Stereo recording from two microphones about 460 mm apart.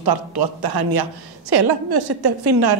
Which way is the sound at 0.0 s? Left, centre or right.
Right.